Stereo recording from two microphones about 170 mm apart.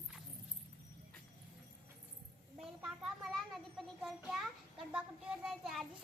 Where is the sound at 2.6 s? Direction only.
Centre (ahead or behind).